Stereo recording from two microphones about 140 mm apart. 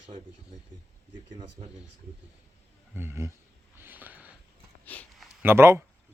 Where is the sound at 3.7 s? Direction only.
15° right (ahead or behind).